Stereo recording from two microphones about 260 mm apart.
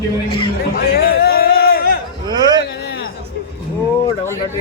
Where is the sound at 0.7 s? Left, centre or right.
Left.